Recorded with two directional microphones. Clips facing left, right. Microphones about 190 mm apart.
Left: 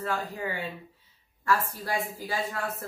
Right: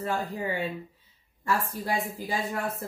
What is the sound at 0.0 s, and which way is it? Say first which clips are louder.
Speech: right 2 dB; 20° right (ahead or behind).